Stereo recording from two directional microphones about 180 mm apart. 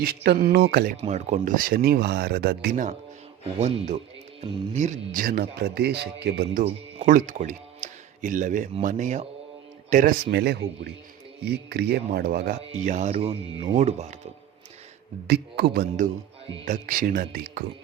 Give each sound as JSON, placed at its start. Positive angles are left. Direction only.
{"t": 0.0, "sound": "speech", "side_deg": -65}
{"t": 0.9, "sound": "speech", "side_deg": -40}
{"t": 3.6, "sound": "speech", "side_deg": -35}
{"t": 7.0, "sound": "speech", "side_deg": -45}
{"t": 10.3, "sound": "speech", "side_deg": -65}
{"t": 12.8, "sound": "speech", "side_deg": -40}
{"t": 15.3, "sound": "speech", "side_deg": -65}
{"t": 16.6, "sound": "speech", "side_deg": -45}